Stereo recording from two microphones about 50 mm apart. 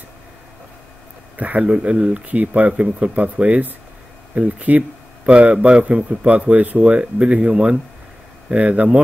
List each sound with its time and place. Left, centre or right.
1.3 s a man's voice: right